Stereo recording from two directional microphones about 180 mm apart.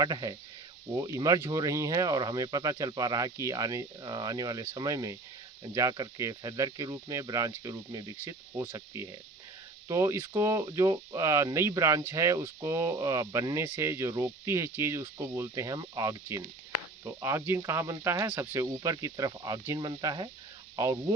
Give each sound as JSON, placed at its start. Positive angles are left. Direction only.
{"t": 0.0, "sound": "speech", "side_deg": -20}